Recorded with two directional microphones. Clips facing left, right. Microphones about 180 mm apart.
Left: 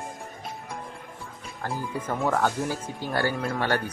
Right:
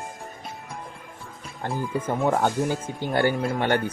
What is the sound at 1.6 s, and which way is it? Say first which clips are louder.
Speech: right 4 dB; 20° right (ahead or behind).